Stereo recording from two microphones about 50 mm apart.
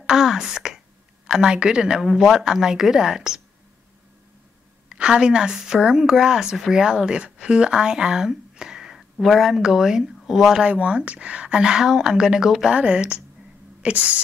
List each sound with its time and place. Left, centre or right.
0.0 s a woman's voice: centre
4.8 s a woman's voice: centre
10.6 s a woman's voice: right
12.7 s speech: right